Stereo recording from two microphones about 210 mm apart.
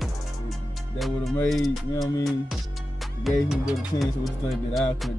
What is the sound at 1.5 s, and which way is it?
Speech, centre (ahead or behind).